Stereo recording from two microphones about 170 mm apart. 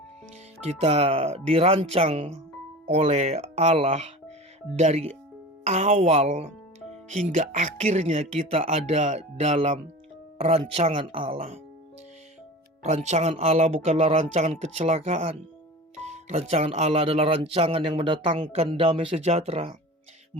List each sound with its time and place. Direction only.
0.8 s speech: 35° right (ahead or behind)
12.8 s speech: 40° right (ahead or behind)